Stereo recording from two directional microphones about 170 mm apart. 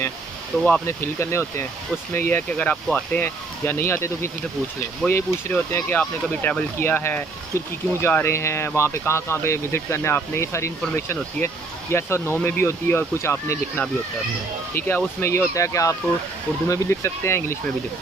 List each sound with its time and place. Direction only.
0.6 s speech: 5° left (ahead or behind)
0.8 s speech: 15° left (ahead or behind)
14.9 s speech: 15° left (ahead or behind)